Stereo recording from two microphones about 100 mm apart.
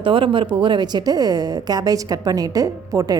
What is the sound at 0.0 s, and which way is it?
A woman's voice, 60° right (ahead or behind).